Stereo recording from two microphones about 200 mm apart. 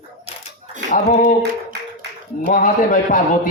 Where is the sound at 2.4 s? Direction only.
40° left (ahead or behind).